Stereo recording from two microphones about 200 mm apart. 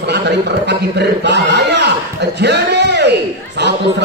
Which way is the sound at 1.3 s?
55° right (ahead or behind).